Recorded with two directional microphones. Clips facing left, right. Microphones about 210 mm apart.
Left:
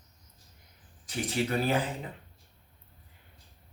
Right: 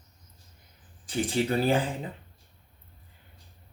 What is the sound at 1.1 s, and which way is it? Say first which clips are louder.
Speech: right 4 dB; 30° right (ahead or behind).